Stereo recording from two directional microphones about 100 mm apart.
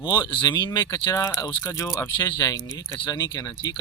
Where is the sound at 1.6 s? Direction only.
30° left (ahead or behind).